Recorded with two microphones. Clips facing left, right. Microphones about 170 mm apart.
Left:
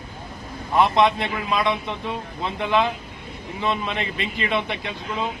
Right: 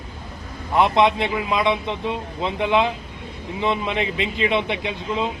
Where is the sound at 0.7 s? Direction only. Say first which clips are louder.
Right 1 dB; 15° right (ahead or behind).